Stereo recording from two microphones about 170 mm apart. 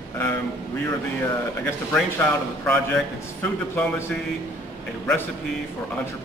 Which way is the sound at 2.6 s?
10° left (ahead or behind).